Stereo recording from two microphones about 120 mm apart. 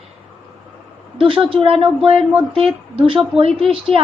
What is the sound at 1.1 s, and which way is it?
Speech, 45° right (ahead or behind).